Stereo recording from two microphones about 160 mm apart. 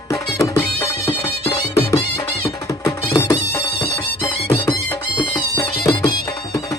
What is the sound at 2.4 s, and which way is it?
Music, 15° left (ahead or behind).